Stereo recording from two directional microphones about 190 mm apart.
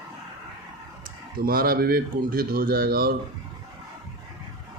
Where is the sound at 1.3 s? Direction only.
50° right (ahead or behind).